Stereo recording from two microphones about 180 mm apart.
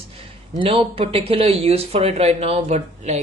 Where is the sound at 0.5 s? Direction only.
30° right (ahead or behind).